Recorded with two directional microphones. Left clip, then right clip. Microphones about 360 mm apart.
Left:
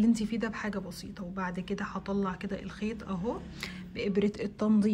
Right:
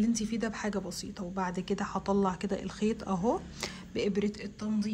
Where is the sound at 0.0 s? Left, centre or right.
Centre.